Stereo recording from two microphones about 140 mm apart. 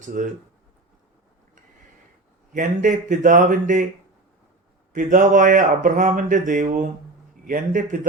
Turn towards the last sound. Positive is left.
turn(degrees=-70)  # may be behind; listen again after turning